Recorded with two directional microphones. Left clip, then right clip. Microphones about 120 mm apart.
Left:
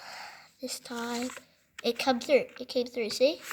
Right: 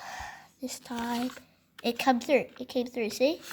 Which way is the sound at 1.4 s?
15° right (ahead or behind).